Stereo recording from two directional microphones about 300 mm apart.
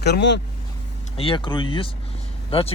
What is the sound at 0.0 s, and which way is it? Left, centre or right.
Speech, left.